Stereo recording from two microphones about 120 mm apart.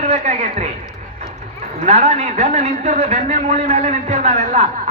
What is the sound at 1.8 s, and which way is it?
A man's voice, 70° right (ahead or behind).